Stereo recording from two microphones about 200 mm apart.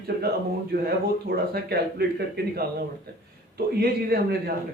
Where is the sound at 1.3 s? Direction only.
55° right (ahead or behind).